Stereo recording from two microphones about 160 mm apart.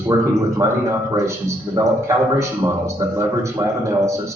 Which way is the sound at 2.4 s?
20° right (ahead or behind).